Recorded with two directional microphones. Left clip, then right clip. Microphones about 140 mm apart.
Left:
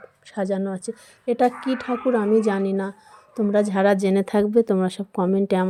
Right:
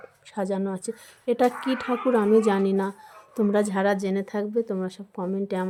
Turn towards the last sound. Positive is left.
turn(degrees=50)  # may be behind; listen again after turning